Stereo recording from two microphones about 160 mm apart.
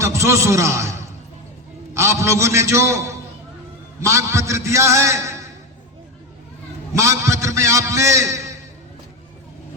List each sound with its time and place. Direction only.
0.0 s a man's voice: 15° right (ahead or behind)
6.9 s a man's voice: 20° right (ahead or behind)